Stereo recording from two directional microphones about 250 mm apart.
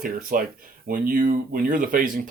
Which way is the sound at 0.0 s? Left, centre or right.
Right.